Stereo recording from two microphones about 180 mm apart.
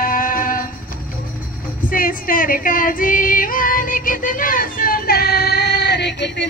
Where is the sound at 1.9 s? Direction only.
50° left (ahead or behind).